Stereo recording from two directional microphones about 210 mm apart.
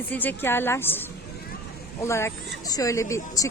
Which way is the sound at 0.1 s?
10° left (ahead or behind).